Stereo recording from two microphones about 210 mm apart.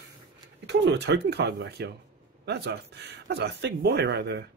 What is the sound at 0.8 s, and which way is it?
Speech, 55° right (ahead or behind).